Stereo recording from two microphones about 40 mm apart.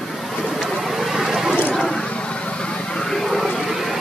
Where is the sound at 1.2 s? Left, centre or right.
Centre.